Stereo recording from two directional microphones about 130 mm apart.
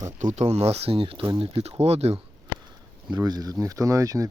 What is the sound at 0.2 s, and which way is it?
Speech, 65° right (ahead or behind).